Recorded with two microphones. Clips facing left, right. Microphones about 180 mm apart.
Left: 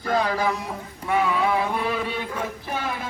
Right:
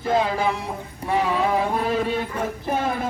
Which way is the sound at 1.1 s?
35° right (ahead or behind).